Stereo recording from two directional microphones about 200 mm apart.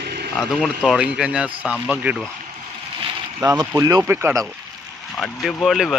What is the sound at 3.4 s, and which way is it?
Speech, 15° right (ahead or behind).